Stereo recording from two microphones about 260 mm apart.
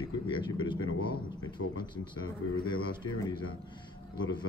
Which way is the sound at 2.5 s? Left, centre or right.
Centre.